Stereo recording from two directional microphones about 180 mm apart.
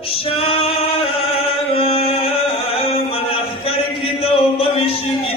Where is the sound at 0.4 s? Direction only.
30° left (ahead or behind).